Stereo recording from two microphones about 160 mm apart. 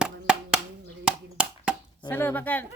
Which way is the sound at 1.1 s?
5° right (ahead or behind).